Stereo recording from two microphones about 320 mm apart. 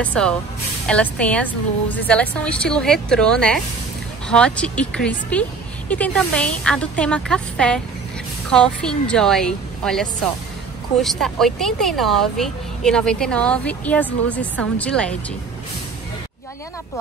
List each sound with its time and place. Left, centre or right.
0.0 s speech: centre